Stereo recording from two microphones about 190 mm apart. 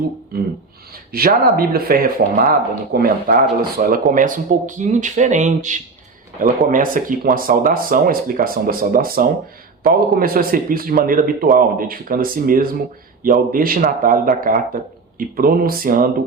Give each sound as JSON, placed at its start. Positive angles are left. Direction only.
{"t": 0.3, "sound": "speech", "side_deg": -55}